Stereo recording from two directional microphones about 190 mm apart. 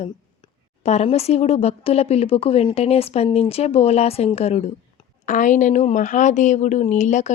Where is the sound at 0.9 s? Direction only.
35° left (ahead or behind).